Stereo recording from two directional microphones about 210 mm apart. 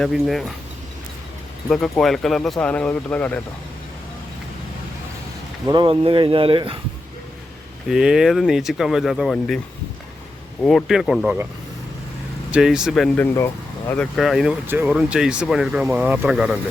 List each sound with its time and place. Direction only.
0.0 s speech: centre (ahead or behind)
1.7 s speech: centre (ahead or behind)
5.6 s speech: 20° right (ahead or behind)
7.9 s speech: centre (ahead or behind)
10.6 s speech: centre (ahead or behind)
12.5 s speech: 5° right (ahead or behind)
13.3 s speech: 15° left (ahead or behind); by 16.6 s 5° right (ahead or behind)